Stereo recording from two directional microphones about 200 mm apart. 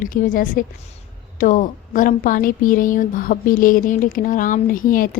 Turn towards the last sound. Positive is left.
turn(degrees=45)  # may be behind; listen again after turning